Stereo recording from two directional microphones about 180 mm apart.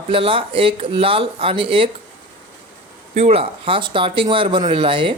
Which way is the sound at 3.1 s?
35° right (ahead or behind).